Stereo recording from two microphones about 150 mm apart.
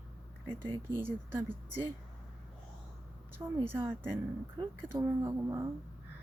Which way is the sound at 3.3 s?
15° right (ahead or behind).